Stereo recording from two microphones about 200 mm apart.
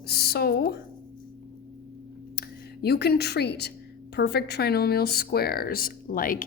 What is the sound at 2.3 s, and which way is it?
Speech, 55° left (ahead or behind).